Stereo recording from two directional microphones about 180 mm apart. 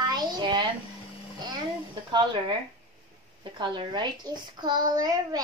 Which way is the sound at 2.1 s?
25° right (ahead or behind).